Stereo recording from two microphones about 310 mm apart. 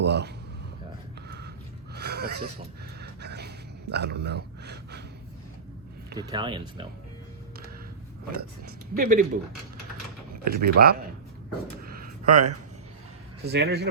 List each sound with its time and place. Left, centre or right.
0.0 s a man's voice: right
2.0 s speech: right
3.0 s a sound: right
6.1 s speech: centre
8.4 s speech: right
10.5 s speech: right
11.8 s a sound: right
13.4 s speech: right